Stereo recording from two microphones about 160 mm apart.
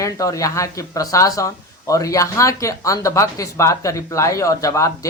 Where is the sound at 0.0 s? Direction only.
20° left (ahead or behind).